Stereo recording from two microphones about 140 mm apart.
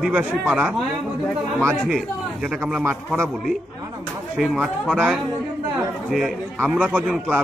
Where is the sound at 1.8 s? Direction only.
5° right (ahead or behind).